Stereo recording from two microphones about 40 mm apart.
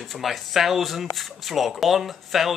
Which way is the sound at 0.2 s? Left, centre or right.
Centre.